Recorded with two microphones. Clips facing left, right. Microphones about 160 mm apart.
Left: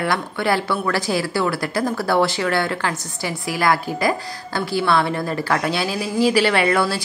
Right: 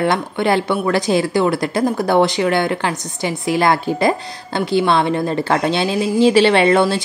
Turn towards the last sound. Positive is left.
turn(degrees=-25)  # may be behind; listen again after turning